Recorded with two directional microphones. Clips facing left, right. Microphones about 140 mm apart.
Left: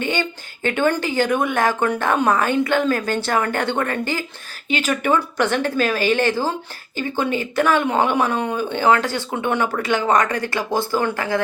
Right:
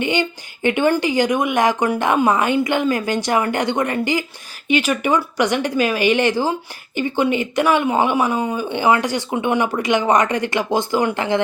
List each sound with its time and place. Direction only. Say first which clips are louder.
0.0 s speech: right 3 dB; 15° right (ahead or behind)